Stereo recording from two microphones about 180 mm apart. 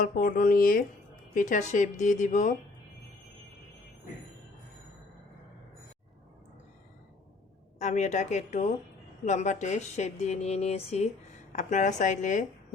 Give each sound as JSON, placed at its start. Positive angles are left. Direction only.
{"t": 0.0, "sound": "speech", "side_deg": 50}
{"t": 7.8, "sound": "speech", "side_deg": 40}